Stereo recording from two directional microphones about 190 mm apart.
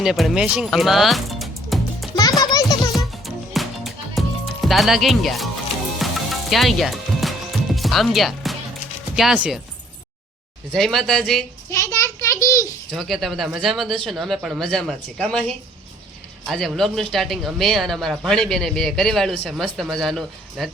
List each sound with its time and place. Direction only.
0.0 s speech: centre (ahead or behind)
2.4 s music: 20° left (ahead or behind)
2.9 s music: centre (ahead or behind)
4.6 s speech: centre (ahead or behind)
6.0 s music: centre (ahead or behind)
9.1 s speech: 5° right (ahead or behind)
10.7 s speech: 5° left (ahead or behind)
11.7 s a sound: 15° left (ahead or behind)
12.9 s speech: centre (ahead or behind)